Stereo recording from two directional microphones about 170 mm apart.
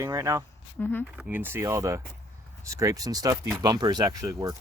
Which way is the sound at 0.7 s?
10° left (ahead or behind).